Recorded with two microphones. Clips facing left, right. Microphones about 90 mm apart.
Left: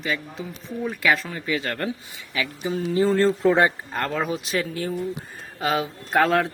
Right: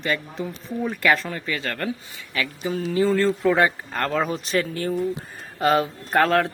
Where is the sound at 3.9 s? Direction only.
Centre (ahead or behind).